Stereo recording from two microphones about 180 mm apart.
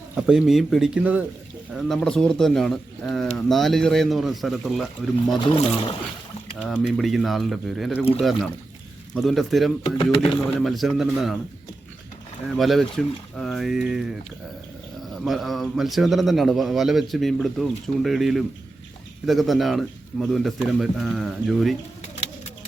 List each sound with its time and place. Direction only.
0.2 s speech: 5° right (ahead or behind)
5.5 s speech: 30° left (ahead or behind)
6.6 s speech: 5° right (ahead or behind)
12.5 s speech: centre (ahead or behind)
15.1 s speech: centre (ahead or behind)